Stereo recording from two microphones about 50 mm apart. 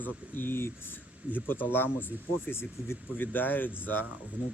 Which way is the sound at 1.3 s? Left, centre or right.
Left.